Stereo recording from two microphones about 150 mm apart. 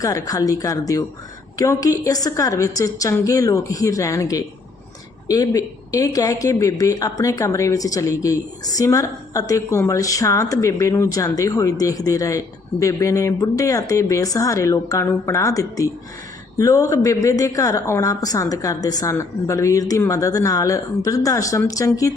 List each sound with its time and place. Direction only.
0.0 s speech: 20° left (ahead or behind)